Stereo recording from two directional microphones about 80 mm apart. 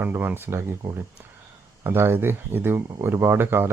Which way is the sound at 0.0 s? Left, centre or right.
Right.